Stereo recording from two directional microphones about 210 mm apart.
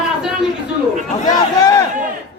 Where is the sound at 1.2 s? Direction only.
15° left (ahead or behind).